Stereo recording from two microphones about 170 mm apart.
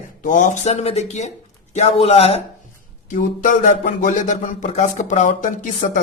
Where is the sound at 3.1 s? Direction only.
50° left (ahead or behind).